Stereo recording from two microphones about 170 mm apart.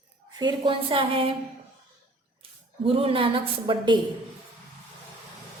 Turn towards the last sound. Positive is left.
turn(degrees=-30)  # may be behind; listen again after turning